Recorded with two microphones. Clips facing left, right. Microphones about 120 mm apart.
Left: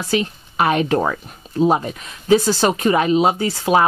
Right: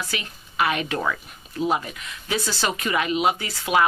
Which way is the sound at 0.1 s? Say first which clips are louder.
Left 13 dB; 35° left (ahead or behind).